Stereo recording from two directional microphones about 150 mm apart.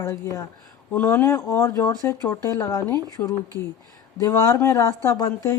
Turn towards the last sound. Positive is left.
turn(degrees=20)  # may be behind; listen again after turning